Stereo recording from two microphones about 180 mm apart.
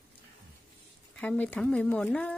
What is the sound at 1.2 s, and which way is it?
Speech, 10° left (ahead or behind).